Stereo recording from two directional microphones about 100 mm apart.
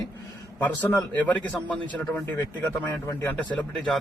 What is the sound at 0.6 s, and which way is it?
Speech, 15° left (ahead or behind).